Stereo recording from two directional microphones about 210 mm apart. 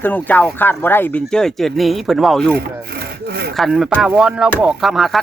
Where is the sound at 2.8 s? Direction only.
50° right (ahead or behind).